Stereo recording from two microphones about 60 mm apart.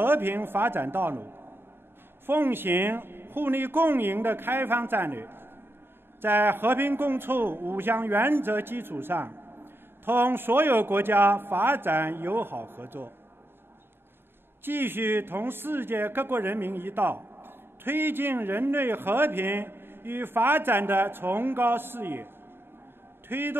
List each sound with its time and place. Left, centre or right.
0.0 s speech: right
14.6 s a man's voice: right